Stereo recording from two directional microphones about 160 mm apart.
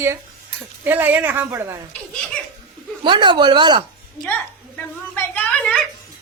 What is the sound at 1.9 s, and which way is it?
Speech, 5° left (ahead or behind).